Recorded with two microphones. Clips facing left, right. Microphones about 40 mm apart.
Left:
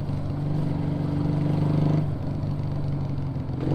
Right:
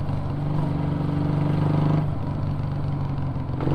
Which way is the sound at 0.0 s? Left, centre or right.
Right.